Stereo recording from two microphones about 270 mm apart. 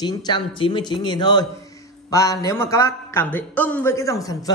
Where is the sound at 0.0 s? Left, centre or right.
Centre.